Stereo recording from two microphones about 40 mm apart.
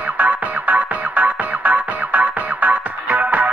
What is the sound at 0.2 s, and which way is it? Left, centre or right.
Music, right.